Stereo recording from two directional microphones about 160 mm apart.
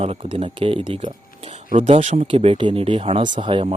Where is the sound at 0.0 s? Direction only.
40° right (ahead or behind).